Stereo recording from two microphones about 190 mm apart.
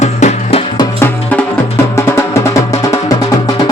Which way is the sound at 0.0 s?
35° left (ahead or behind).